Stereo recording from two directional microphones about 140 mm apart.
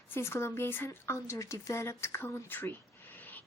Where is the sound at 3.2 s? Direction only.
10° left (ahead or behind).